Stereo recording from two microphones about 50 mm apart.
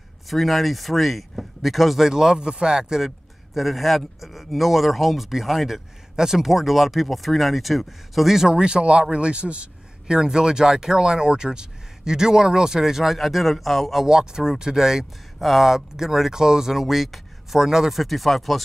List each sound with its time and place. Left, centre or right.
0.3 s speech: centre; by 10.1 s right
10.1 s speech: centre
14.0 s speech: centre
18.0 s speech: centre